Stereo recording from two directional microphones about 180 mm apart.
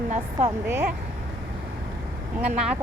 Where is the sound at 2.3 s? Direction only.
5° right (ahead or behind).